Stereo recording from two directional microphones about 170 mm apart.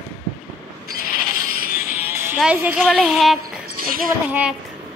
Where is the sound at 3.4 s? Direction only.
60° right (ahead or behind).